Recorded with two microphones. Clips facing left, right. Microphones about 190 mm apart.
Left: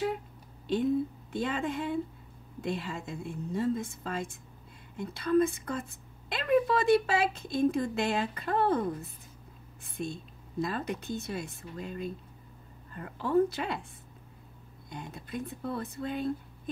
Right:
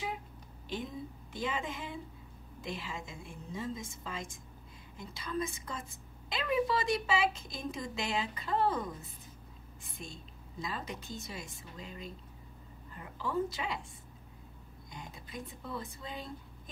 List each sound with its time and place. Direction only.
0.7 s a woman's voice: 60° left (ahead or behind)
14.9 s a woman's voice: 60° left (ahead or behind)